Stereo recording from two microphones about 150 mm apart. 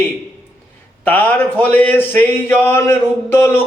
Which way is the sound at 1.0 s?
10° left (ahead or behind).